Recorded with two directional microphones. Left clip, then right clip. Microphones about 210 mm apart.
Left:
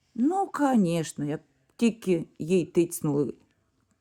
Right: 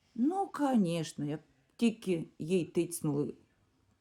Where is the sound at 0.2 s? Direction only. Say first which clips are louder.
Left 7 dB; 30° left (ahead or behind).